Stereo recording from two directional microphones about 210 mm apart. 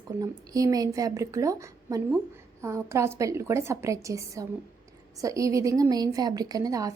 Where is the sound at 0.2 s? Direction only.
15° right (ahead or behind).